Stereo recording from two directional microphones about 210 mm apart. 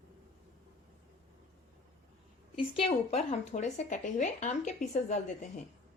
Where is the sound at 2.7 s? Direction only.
30° left (ahead or behind).